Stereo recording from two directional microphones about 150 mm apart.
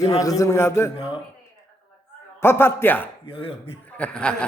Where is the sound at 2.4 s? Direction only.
15° left (ahead or behind).